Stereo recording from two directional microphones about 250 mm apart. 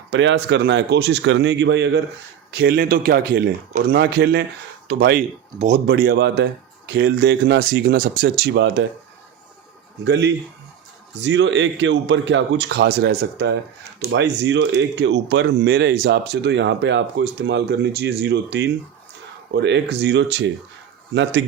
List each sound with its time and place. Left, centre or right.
0.1 s a man's voice: right
10.0 s speech: right